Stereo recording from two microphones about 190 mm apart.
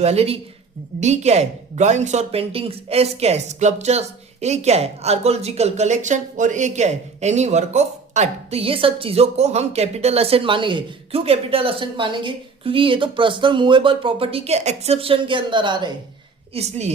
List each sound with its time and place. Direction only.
0.0 s a woman's voice: 35° right (ahead or behind)
16.6 s a woman's voice: 35° right (ahead or behind)